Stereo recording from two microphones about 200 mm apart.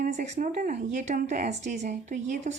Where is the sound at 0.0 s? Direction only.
35° right (ahead or behind).